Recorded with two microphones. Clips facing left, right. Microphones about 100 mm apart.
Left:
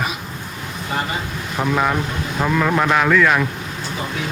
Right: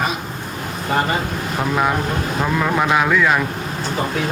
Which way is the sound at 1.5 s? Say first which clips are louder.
Even; 5° right (ahead or behind).